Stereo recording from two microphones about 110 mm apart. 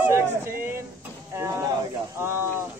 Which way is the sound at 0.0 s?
25° right (ahead or behind).